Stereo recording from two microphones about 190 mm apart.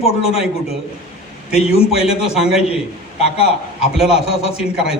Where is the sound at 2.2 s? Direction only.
Centre (ahead or behind).